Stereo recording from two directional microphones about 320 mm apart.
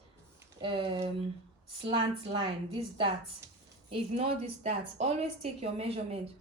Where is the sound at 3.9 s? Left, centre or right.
Centre.